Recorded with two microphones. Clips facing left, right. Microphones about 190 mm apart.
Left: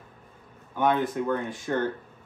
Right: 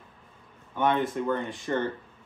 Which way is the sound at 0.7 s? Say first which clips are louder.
Left 1 dB; centre (ahead or behind).